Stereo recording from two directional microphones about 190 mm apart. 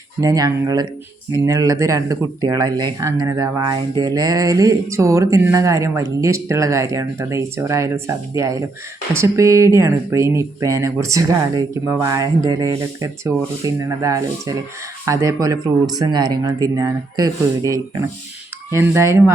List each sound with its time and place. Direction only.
0.2 s speech: 20° right (ahead or behind)